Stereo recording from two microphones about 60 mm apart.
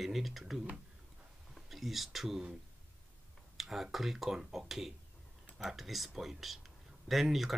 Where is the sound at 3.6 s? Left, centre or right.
Centre.